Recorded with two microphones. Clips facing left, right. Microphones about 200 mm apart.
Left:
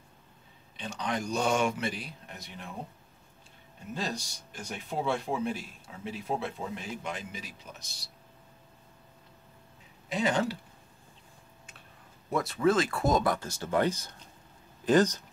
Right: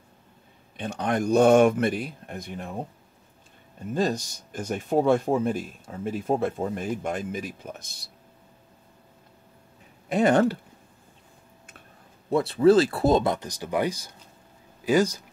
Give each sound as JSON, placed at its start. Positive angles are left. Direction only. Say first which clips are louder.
{"t": 0.7, "sound": "speech", "louder": "right 7 dB", "side_deg": -55}
{"t": 3.9, "sound": "speech", "louder": "right 10 dB", "side_deg": -50}
{"t": 10.0, "sound": "speech", "louder": "right 8 dB", "side_deg": -55}
{"t": 12.3, "sound": "speech", "louder": "right 8 dB", "side_deg": -30}